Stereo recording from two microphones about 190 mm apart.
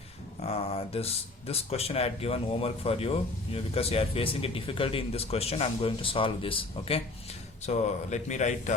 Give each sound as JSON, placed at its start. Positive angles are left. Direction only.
{"t": 0.4, "sound": "speech", "side_deg": 30}